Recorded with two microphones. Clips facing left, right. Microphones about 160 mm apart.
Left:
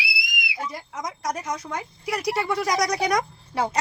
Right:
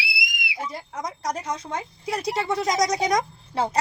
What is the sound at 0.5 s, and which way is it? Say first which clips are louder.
A woman's voice: right 1 dB; 30° right (ahead or behind).